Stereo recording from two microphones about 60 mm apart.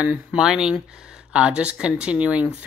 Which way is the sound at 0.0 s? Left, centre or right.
Centre.